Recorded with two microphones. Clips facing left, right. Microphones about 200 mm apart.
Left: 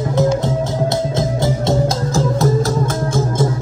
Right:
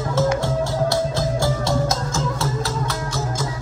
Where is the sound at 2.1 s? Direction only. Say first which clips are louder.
Left 8 dB; 35° left (ahead or behind); by 3.5 s 50° left (ahead or behind).